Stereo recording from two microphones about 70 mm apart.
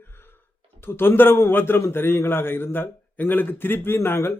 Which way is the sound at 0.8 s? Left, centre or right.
Left.